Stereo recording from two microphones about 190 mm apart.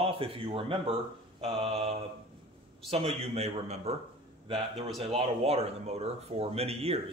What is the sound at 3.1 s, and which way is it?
A man's voice, 35° right (ahead or behind).